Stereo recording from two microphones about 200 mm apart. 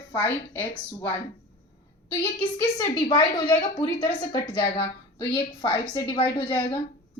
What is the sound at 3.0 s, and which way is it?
A woman's voice, 20° left (ahead or behind).